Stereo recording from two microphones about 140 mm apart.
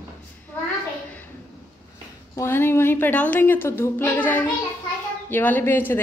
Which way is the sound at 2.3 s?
20° left (ahead or behind).